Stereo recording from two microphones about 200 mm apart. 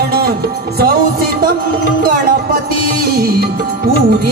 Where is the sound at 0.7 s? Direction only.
50° right (ahead or behind).